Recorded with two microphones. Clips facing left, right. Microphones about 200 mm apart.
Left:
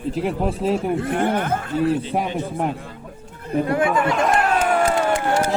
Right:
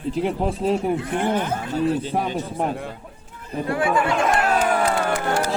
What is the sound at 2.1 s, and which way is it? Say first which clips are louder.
Speech: left 1 dB; 15° left (ahead or behind).